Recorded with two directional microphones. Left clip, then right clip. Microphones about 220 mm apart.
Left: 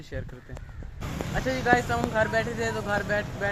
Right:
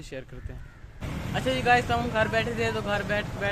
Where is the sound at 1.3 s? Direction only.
Centre (ahead or behind).